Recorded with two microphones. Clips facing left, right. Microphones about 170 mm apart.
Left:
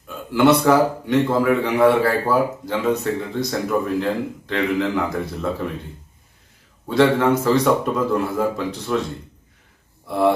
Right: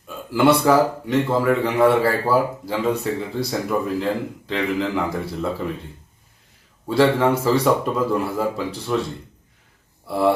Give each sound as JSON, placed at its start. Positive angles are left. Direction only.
{"t": 0.3, "sound": "a man's voice", "side_deg": -5}
{"t": 6.8, "sound": "a man's voice", "side_deg": -5}
{"t": 10.1, "sound": "a man's voice", "side_deg": -5}